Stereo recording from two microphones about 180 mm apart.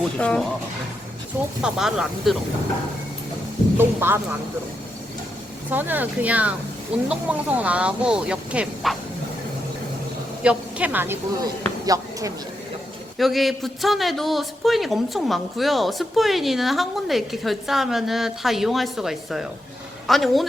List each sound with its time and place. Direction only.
0.2 s a man's voice: 5° left (ahead or behind)
1.6 s a man's voice: 5° right (ahead or behind)
3.8 s speech: 10° right (ahead or behind)
5.7 s speech: 10° right (ahead or behind)
10.4 s speech: 5° right (ahead or behind)
13.1 s a man's voice: centre (ahead or behind)